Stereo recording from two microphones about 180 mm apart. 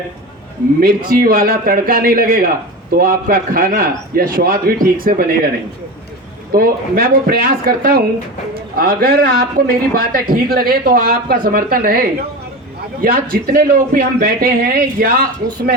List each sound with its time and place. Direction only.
0.8 s a man's voice: 55° right (ahead or behind)
6.5 s a man's voice: 55° right (ahead or behind)